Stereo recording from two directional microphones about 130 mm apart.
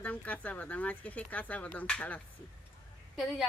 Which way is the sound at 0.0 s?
10° left (ahead or behind).